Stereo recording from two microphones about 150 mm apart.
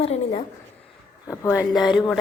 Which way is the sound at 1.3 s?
20° left (ahead or behind).